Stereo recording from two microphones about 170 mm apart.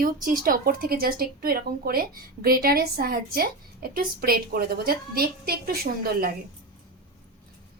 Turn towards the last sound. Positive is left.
turn(degrees=-65)  # may be behind; listen again after turning